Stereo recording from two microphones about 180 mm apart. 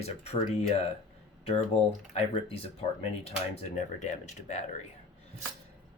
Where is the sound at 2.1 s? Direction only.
35° left (ahead or behind).